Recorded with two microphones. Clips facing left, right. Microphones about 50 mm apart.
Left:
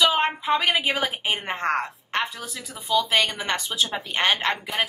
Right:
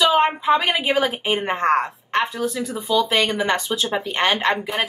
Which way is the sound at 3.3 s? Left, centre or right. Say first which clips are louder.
Right 7 dB; centre.